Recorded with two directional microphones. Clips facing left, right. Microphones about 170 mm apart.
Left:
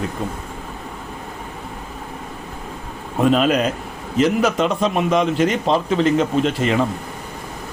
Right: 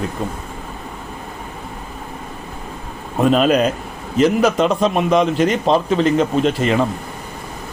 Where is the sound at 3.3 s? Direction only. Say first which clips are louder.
Right 3 dB; 40° right (ahead or behind).